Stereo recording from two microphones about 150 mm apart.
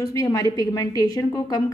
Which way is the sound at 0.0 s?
25° left (ahead or behind).